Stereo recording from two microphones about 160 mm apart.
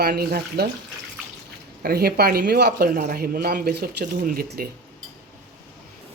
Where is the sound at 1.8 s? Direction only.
75° right (ahead or behind).